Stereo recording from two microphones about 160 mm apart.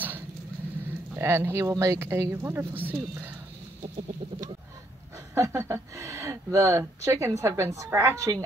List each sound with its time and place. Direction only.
1.1 s speech: 15° right (ahead or behind)
3.8 s chicken: 30° right (ahead or behind)
5.3 s speech: 20° right (ahead or behind)